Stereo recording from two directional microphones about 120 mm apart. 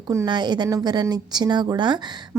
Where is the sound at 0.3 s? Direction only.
35° right (ahead or behind).